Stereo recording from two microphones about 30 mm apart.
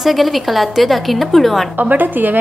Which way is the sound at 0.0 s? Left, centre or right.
Centre.